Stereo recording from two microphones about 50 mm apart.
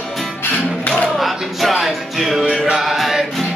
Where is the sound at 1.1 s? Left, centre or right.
Centre.